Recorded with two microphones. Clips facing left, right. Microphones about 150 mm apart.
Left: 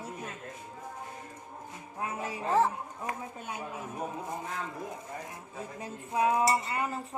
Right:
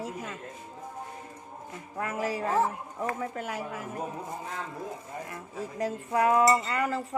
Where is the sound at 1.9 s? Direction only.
80° right.